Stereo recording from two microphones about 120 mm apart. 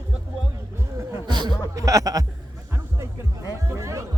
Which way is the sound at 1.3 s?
35° right (ahead or behind).